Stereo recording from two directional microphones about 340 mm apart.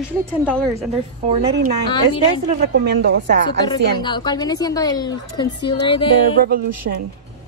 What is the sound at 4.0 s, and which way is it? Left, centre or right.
A woman's voice, centre.